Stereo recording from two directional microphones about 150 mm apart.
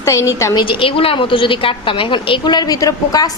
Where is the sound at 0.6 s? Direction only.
35° left (ahead or behind).